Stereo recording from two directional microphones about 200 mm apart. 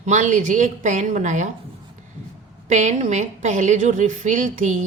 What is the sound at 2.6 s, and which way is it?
A woman's voice, 35° right (ahead or behind).